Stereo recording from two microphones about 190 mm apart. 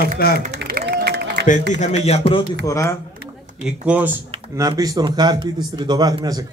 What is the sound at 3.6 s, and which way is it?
Speech, 5° right (ahead or behind).